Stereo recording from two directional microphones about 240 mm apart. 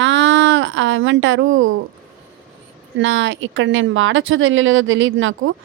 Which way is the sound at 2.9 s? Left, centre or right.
Right.